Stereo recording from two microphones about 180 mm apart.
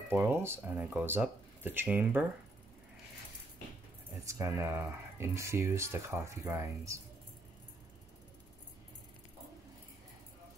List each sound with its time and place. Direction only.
0.1 s speech: 15° right (ahead or behind)
4.3 s speech: 15° right (ahead or behind)